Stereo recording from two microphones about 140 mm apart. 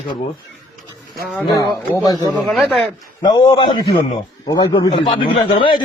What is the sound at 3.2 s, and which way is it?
A man's voice, 30° left (ahead or behind).